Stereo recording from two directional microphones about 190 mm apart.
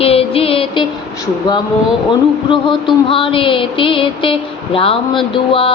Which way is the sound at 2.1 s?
25° left (ahead or behind).